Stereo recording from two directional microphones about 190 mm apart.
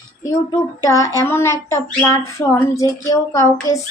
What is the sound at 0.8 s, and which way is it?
Speech, 15° left (ahead or behind).